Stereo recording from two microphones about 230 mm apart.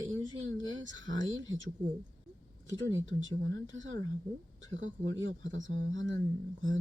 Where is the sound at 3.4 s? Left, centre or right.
Right.